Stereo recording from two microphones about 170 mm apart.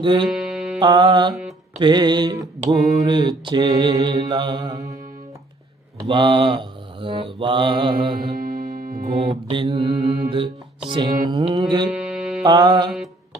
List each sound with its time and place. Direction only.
0.0 s mantra: 30° right (ahead or behind)
0.3 s music: centre (ahead or behind)
0.8 s mantra: 25° right (ahead or behind)
1.3 s speech: centre (ahead or behind)
1.8 s mantra: 25° right (ahead or behind)
6.1 s mantra: 30° right (ahead or behind)
8.4 s music: 60° right (ahead or behind)
9.2 s mantra: 25° right (ahead or behind)
11.9 s music: 5° right (ahead or behind)
12.4 s mantra: 25° right (ahead or behind)